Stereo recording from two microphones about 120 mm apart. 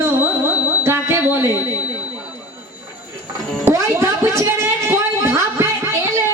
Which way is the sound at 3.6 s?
25° right (ahead or behind).